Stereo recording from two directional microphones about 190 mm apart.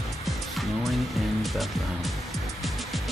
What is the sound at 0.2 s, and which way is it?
Music, centre (ahead or behind).